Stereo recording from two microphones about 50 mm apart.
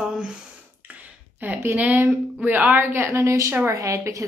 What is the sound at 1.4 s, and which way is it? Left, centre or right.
A woman's voice, right.